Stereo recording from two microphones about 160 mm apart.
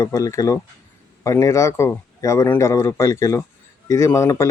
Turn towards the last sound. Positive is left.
turn(degrees=15)  # may be behind; listen again after turning